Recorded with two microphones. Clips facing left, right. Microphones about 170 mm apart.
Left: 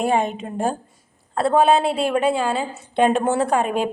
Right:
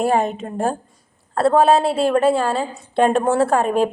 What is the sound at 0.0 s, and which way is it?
Speech, centre (ahead or behind).